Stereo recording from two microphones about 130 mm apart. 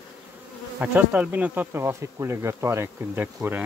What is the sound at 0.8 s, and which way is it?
Speech, 10° right (ahead or behind).